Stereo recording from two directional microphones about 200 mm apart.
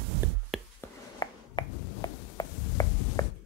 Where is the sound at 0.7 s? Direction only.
20° left (ahead or behind).